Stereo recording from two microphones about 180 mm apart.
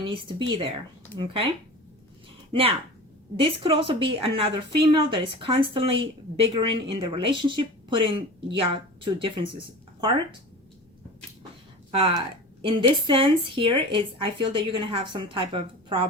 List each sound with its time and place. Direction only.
0.0 s speech: 30° right (ahead or behind)
2.5 s a woman's voice: 30° right (ahead or behind)
11.9 s speech: 30° right (ahead or behind)